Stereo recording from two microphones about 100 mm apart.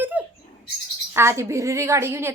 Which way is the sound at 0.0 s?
15° right (ahead or behind).